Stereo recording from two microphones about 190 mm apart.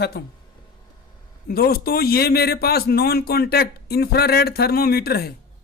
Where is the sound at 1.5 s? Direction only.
55° left (ahead or behind).